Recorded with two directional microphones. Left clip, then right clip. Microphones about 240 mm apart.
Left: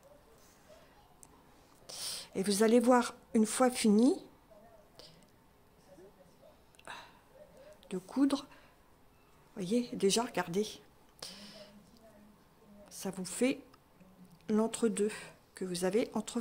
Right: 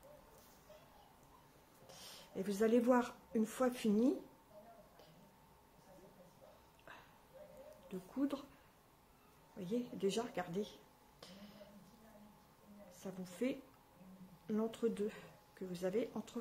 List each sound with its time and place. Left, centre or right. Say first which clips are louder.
1.9 s a woman's voice: left 13 dB; left
6.9 s a sound: left 10 dB; left
7.9 s speech: left 9 dB; left
9.6 s speech: left 8 dB; left
11.2 s a sound: left 11 dB; left
13.0 s speech: left 9 dB; left